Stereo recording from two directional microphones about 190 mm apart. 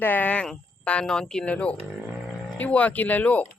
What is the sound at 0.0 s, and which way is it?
Speech, 10° left (ahead or behind).